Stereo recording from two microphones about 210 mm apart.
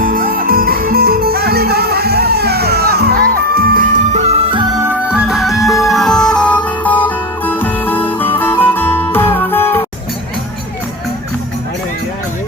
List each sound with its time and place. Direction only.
0.0 s music: 45° right (ahead or behind); by 4.9 s 20° right (ahead or behind)
5.0 s music: 5° right (ahead or behind)